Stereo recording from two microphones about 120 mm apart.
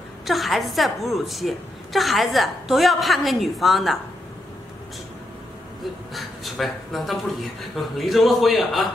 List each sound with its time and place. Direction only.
0.3 s a woman's voice: centre (ahead or behind)
6.1 s a woman's voice: centre (ahead or behind)